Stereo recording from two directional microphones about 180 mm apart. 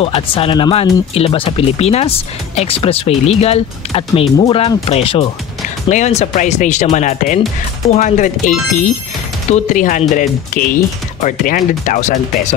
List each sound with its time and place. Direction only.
0.0 s speech: 30° left (ahead or behind)